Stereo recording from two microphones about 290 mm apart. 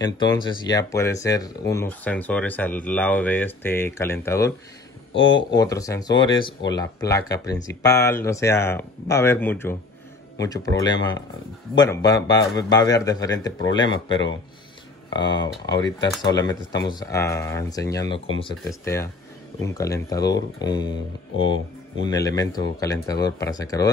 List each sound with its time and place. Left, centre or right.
0.0 s speech: centre